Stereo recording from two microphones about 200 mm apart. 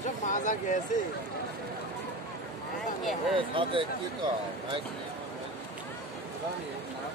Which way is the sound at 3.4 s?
25° right (ahead or behind).